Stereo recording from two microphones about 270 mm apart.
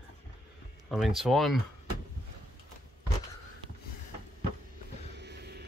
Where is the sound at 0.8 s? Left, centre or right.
Centre.